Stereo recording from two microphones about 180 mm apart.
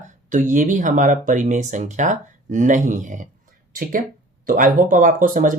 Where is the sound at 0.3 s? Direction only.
45° right (ahead or behind).